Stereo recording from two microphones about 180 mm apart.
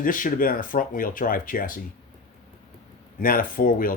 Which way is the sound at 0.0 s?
50° left (ahead or behind).